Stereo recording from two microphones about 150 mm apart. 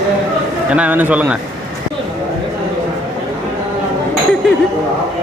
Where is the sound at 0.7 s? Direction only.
10° right (ahead or behind).